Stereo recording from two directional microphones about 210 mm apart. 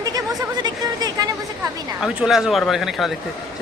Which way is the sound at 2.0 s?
Centre (ahead or behind).